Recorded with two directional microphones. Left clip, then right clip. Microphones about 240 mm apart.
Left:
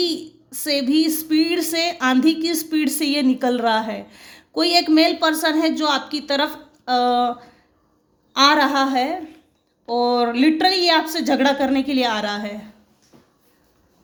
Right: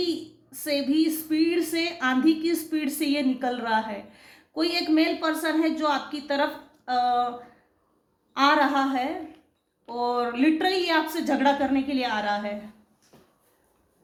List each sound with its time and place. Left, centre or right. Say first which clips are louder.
0.5 s a woman's voice: left 6 dB; left
8.3 s a woman's voice: left 5 dB; left